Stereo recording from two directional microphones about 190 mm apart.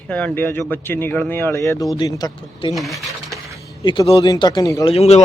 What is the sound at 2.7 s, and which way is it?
Speech, centre (ahead or behind).